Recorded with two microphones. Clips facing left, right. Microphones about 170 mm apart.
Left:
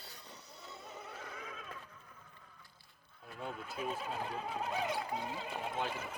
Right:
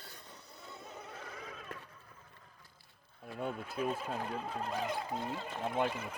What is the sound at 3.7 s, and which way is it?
Speech, centre (ahead or behind).